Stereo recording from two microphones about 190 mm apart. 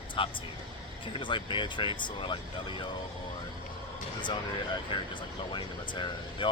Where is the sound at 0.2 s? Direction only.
25° left (ahead or behind).